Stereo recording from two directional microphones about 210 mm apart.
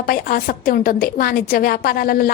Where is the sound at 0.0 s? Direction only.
45° left (ahead or behind).